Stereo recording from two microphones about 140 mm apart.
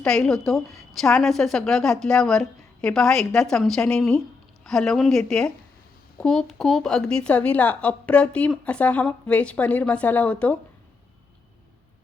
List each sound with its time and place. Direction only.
0.0 s a woman's voice: 5° left (ahead or behind)